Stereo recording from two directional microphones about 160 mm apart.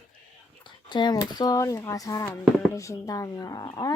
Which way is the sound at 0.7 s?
30° left (ahead or behind).